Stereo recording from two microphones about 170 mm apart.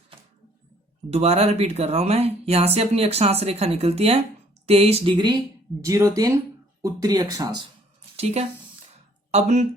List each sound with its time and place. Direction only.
1.1 s speech: 40° right (ahead or behind); by 7.7 s 20° right (ahead or behind)
8.1 s speech: 40° right (ahead or behind)